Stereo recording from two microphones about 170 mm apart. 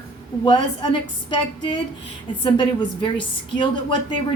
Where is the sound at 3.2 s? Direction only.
30° left (ahead or behind).